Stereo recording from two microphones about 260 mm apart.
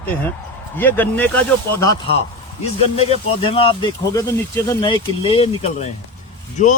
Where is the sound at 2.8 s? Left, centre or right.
Left.